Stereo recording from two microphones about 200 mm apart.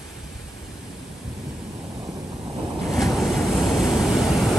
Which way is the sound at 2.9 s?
Centre (ahead or behind).